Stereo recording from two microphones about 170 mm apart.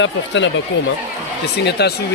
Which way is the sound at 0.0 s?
90° left.